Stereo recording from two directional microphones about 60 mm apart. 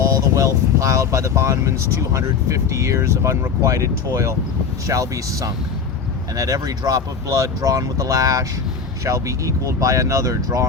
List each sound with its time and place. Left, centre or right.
0.3 s speech: right
4.9 s speech: right
6.3 s speech: right
9.0 s speech: right